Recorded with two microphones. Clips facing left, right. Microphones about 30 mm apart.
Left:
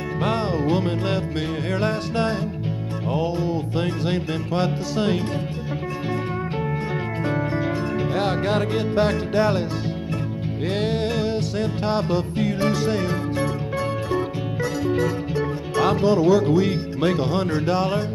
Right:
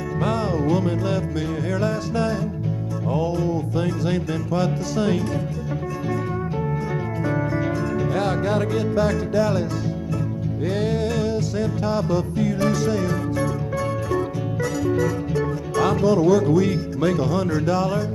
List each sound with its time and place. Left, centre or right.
0.2 s music: left
7.3 s music: left
8.5 s music: left
10.7 s music: left